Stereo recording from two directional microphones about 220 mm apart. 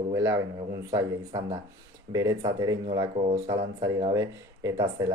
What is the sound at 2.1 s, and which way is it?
Speech, 15° right (ahead or behind).